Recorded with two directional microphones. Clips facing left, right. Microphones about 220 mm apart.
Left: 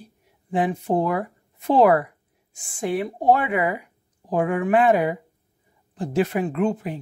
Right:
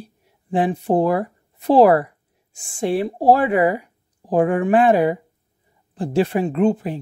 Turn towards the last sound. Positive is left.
turn(degrees=-30)  # may be behind; listen again after turning